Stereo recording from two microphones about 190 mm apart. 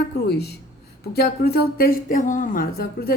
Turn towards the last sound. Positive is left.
turn(degrees=55)  # may be behind; listen again after turning